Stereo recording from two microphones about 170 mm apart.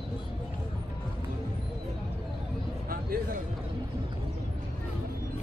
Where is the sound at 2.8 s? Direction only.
60° right (ahead or behind).